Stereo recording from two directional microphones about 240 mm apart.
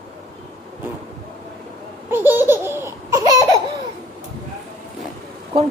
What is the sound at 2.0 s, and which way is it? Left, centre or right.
Laughter, centre.